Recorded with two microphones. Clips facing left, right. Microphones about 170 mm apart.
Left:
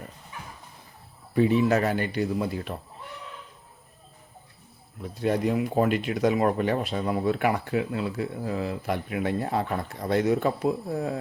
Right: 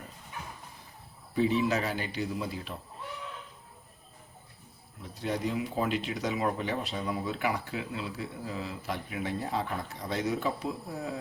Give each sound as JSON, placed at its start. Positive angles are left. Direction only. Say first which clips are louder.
{"t": 1.4, "sound": "speech", "louder": "left 6 dB", "side_deg": 55}
{"t": 5.2, "sound": "speech", "louder": "left 7 dB", "side_deg": 55}